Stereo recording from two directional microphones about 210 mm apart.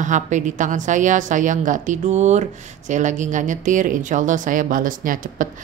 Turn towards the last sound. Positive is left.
turn(degrees=-40)  # may be behind; listen again after turning